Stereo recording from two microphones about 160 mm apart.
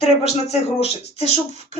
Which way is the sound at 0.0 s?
40° left (ahead or behind).